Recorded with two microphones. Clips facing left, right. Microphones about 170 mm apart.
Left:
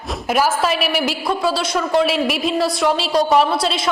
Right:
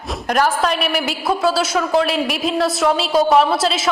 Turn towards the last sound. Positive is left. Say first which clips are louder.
# right 1 dB
turn(degrees=0)  # may be behind; listen again after turning